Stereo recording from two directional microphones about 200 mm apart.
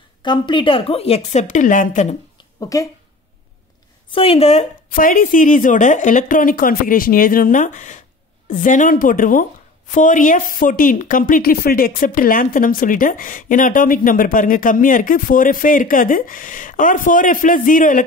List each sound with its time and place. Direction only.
0.2 s a woman's voice: 20° left (ahead or behind); by 2.1 s 40° left (ahead or behind)
2.3 s a sound: 15° left (ahead or behind)
4.1 s a woman's voice: 30° left (ahead or behind)